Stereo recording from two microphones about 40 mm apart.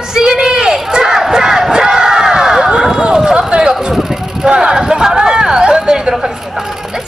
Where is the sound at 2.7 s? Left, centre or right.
Centre.